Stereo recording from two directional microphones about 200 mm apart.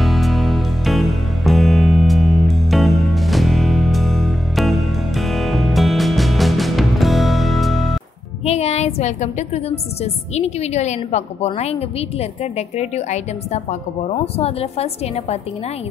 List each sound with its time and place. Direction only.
0.0 s music: centre (ahead or behind)
8.5 s a woman's voice: 30° left (ahead or behind)